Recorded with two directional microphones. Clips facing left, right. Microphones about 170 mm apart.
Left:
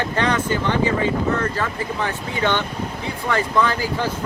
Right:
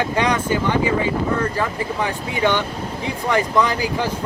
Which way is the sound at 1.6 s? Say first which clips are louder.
Right 2 dB; 15° right (ahead or behind).